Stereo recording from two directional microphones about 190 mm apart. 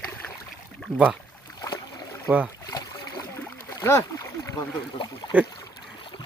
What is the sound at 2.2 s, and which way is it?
Speech, 10° right (ahead or behind).